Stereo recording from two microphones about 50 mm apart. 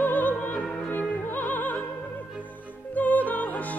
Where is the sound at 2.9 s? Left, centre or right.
Left.